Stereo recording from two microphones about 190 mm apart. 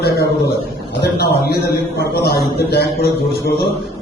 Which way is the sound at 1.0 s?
55° left (ahead or behind).